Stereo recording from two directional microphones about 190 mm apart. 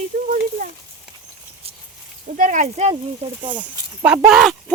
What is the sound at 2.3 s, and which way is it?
Speech, 45° right (ahead or behind).